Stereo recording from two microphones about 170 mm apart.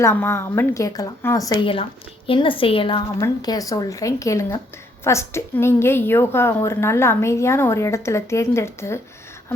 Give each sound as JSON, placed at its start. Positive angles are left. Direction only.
{"t": 0.0, "sound": "a woman's voice", "side_deg": 15}
{"t": 1.6, "sound": "a woman's voice", "side_deg": 30}